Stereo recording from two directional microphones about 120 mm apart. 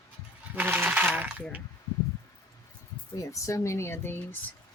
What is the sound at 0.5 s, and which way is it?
Speech, 15° right (ahead or behind).